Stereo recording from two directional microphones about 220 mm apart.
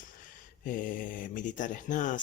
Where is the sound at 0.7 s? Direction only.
35° left (ahead or behind).